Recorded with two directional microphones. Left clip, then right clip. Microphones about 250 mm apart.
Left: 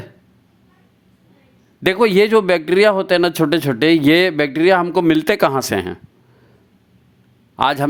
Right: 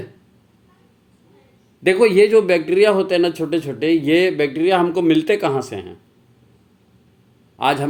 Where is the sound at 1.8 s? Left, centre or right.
Left.